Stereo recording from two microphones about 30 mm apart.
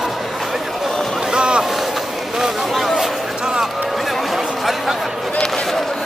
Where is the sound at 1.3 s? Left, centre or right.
Right.